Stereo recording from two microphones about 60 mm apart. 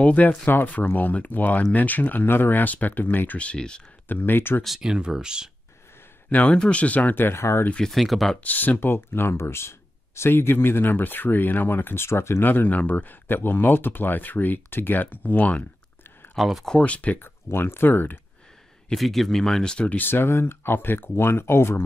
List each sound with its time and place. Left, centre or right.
0.0 s speech: left
4.1 s speech: left
4.6 s speech: centre
6.3 s speech: left
7.2 s speech: left
7.9 s speech: centre
8.4 s speech: left
16.3 s speech: centre
16.6 s speech: centre
17.2 s speech: left
18.9 s speech: centre
20.0 s speech: left